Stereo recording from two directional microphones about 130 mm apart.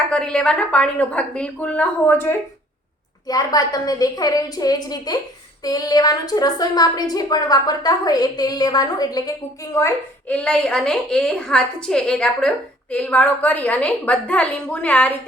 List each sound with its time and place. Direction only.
0.1 s a woman's voice: 5° left (ahead or behind)
3.2 s a woman's voice: 30° left (ahead or behind)
10.2 s a woman's voice: 10° left (ahead or behind)